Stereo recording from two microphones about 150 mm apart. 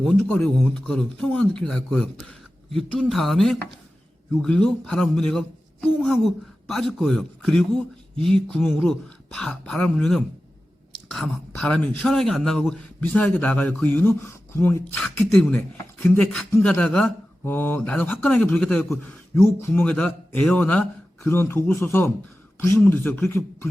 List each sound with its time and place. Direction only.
0.0 s speech: 5° left (ahead or behind)